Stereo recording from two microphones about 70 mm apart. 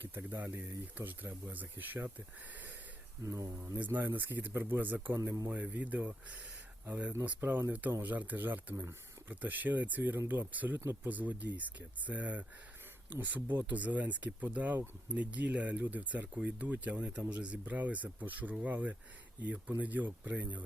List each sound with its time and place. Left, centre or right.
0.1 s speech: right
3.2 s speech: right
3.8 s speech: right
5.5 s speech: right
8.7 s speech: right
9.3 s speech: right
10.8 s speech: right
11.1 s speech: right